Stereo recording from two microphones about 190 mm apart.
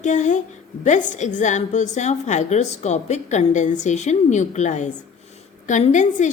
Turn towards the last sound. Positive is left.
turn(degrees=40)  # may be behind; listen again after turning